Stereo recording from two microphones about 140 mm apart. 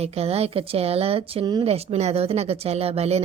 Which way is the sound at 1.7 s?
45° right (ahead or behind).